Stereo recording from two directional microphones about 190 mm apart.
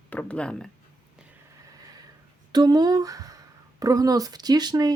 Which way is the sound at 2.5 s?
20° right (ahead or behind).